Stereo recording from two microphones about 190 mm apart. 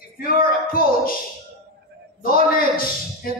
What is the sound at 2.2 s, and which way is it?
Speech, 50° left (ahead or behind).